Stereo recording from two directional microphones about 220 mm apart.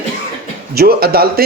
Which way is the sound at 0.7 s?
45° right (ahead or behind).